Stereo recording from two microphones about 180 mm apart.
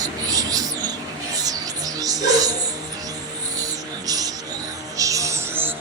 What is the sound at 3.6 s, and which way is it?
Music, 20° right (ahead or behind).